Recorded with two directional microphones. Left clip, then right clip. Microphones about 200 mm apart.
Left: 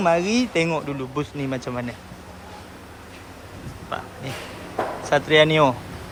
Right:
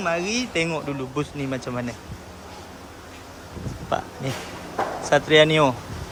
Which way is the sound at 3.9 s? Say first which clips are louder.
Right 5 dB; 25° right (ahead or behind).